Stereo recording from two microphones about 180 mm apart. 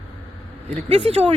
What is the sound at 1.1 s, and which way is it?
Speech, 35° right (ahead or behind).